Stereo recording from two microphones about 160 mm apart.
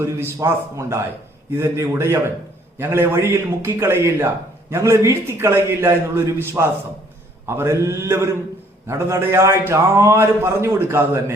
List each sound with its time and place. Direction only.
0.0 s a man's voice: 15° right (ahead or behind)